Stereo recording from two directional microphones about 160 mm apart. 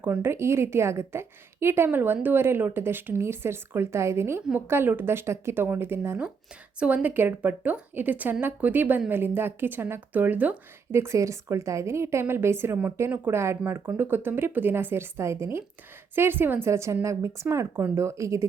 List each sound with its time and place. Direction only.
0.0 s a woman's voice: 15° right (ahead or behind)